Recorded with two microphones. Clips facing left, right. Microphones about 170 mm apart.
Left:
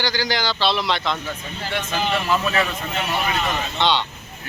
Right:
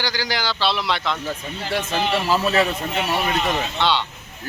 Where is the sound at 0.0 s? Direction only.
10° right (ahead or behind).